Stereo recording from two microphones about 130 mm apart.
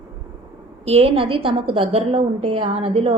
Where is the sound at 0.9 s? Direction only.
50° right (ahead or behind).